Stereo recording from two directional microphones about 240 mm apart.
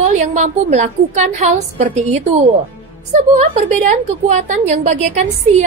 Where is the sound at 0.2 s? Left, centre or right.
Right.